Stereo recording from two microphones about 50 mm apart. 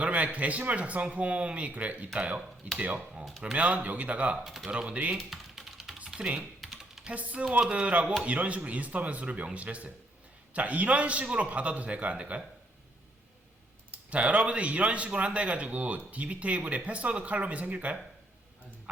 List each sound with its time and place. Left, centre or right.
0.0 s speech: right
3.4 s speech: right
4.4 s speech: centre
4.7 s speech: right
5.1 s typing: centre
6.6 s typing: centre
7.2 s speech: right
14.1 s speech: right